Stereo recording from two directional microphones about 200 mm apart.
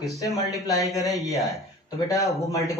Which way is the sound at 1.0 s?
Centre (ahead or behind).